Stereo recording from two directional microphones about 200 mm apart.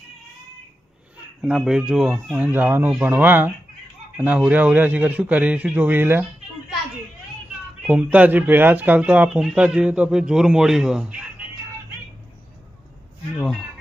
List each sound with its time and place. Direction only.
1.4 s speech: 5° right (ahead or behind)
7.8 s speech: 5° right (ahead or behind)
13.3 s speech: centre (ahead or behind)